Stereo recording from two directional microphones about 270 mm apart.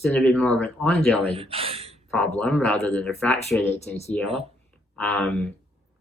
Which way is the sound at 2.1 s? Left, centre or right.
Centre.